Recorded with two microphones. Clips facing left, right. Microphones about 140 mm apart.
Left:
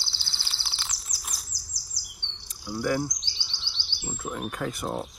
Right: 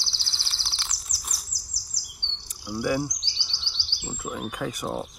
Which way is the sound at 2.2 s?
20° right (ahead or behind).